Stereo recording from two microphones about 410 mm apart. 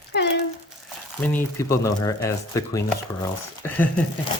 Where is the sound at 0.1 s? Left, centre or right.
Left.